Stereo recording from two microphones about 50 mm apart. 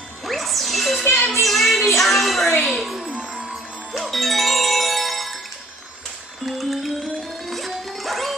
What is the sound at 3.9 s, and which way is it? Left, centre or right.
Music, centre.